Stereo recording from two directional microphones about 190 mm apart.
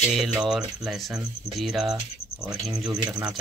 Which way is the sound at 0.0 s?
Centre (ahead or behind).